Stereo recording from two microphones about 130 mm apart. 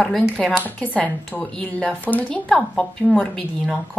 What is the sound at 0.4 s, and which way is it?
Speech, 10° left (ahead or behind).